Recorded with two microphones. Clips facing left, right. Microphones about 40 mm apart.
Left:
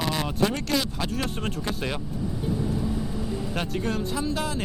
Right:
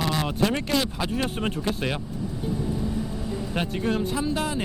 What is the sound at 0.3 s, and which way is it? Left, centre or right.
Speech, centre.